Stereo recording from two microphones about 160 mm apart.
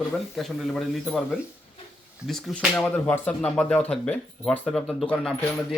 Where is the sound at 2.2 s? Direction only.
Centre (ahead or behind).